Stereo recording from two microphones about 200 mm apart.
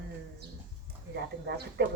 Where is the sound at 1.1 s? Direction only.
55° right (ahead or behind).